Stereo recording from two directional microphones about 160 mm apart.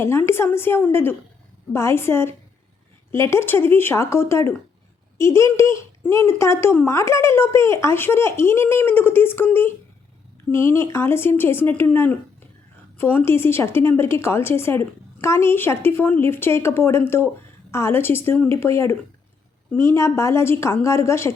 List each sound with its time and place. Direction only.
0.0 s speech: 15° left (ahead or behind)